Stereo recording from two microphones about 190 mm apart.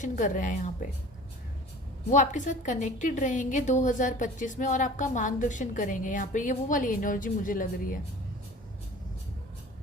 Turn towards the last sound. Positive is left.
turn(degrees=45)  # may be behind; listen again after turning